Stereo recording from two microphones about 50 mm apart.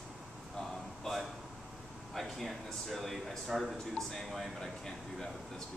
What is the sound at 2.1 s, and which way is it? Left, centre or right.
A man's voice, centre.